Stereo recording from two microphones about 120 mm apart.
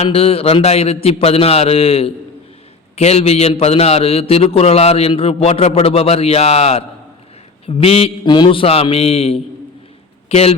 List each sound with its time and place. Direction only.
0.0 s a man's voice: 50° left (ahead or behind)